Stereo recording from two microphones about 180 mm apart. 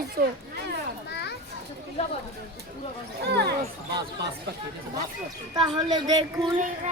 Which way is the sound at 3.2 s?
65° right (ahead or behind).